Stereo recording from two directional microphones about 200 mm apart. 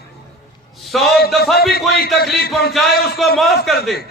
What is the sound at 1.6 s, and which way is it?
Speech, 50° left (ahead or behind).